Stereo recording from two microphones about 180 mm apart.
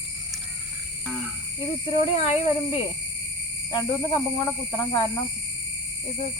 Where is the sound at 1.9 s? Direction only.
35° left (ahead or behind).